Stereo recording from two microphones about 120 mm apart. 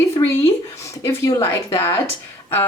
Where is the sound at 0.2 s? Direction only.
35° left (ahead or behind).